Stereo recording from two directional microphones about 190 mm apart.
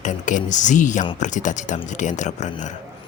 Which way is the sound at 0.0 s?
40° left (ahead or behind).